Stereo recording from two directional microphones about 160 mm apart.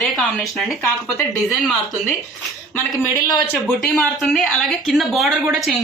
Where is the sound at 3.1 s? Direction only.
15° left (ahead or behind).